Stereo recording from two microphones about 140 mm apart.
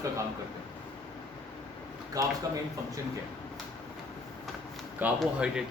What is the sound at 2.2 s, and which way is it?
Speech, 30° right (ahead or behind).